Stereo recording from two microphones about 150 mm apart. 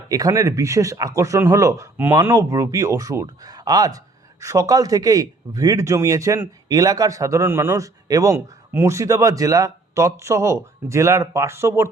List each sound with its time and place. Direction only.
0.1 s speech: 25° right (ahead or behind)